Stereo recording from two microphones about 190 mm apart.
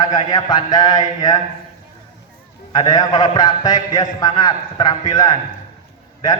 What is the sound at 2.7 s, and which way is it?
A man's voice, 20° left (ahead or behind).